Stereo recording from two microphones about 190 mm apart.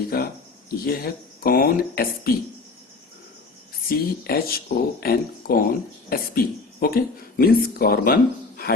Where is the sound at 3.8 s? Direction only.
50° left (ahead or behind).